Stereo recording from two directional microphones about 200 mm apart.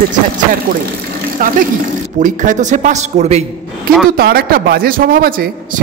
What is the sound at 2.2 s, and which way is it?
Speech, 40° right (ahead or behind).